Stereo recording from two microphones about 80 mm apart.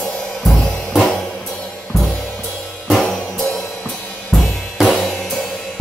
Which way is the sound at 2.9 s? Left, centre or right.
Centre.